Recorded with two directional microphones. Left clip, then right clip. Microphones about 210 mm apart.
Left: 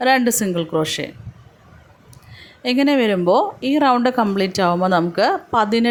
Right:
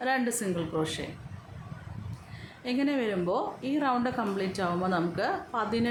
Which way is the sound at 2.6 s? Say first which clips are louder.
Left 13 dB; 40° left (ahead or behind).